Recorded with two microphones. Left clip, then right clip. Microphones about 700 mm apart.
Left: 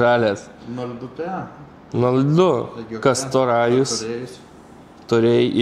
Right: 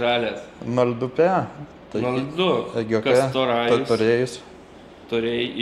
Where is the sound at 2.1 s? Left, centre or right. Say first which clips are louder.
Left 5 dB; left.